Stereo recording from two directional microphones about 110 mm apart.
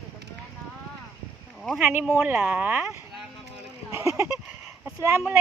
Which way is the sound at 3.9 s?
25° right (ahead or behind).